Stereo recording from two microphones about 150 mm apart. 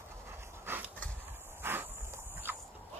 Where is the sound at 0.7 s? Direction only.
15° right (ahead or behind).